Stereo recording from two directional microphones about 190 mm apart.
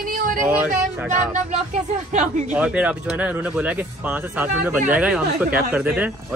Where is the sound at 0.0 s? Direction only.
45° right (ahead or behind).